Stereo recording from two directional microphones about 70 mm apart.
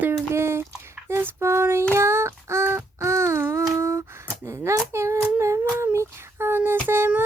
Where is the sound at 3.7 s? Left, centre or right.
Right.